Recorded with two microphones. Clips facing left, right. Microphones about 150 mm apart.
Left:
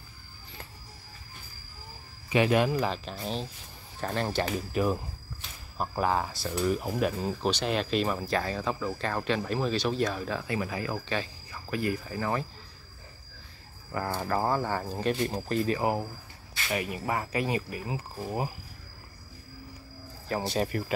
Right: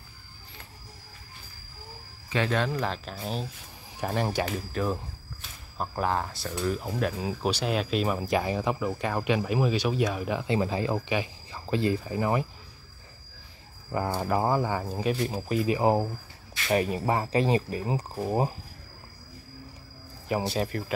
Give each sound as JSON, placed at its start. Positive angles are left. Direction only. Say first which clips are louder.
{"t": 2.2, "sound": "speech", "louder": "left 3 dB", "side_deg": 15}
{"t": 2.8, "sound": "speech", "louder": "left 1 dB", "side_deg": 0}
{"t": 4.5, "sound": "speech", "louder": "left 2 dB", "side_deg": 10}
{"t": 8.2, "sound": "speech", "louder": "right 3 dB", "side_deg": -15}
{"t": 11.1, "sound": "cricket", "louder": "right 3 dB", "side_deg": -15}
{"t": 11.7, "sound": "speech", "louder": "right 4 dB", "side_deg": -25}
{"t": 14.1, "sound": "speech", "louder": "right 2 dB", "side_deg": -15}
{"t": 15.8, "sound": "speech", "louder": "right 5 dB", "side_deg": -30}
{"t": 20.2, "sound": "speech", "louder": "right 3 dB", "side_deg": -15}
{"t": 20.5, "sound": "speech", "louder": "even", "side_deg": 0}